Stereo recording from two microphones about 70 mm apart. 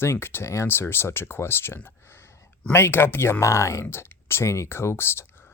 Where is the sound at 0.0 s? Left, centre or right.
Left.